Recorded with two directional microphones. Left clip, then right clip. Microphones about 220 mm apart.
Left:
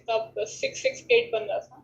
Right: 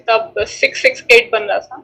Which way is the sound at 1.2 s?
65° right (ahead or behind).